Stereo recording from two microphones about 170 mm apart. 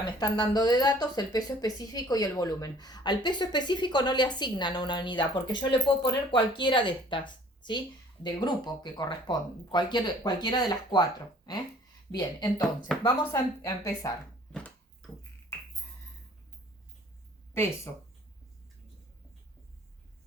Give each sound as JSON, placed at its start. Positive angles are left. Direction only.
{"t": 0.2, "sound": "speech", "side_deg": 25}
{"t": 12.1, "sound": "speech", "side_deg": 25}
{"t": 14.5, "sound": "a sound", "side_deg": 5}
{"t": 17.9, "sound": "speech", "side_deg": 15}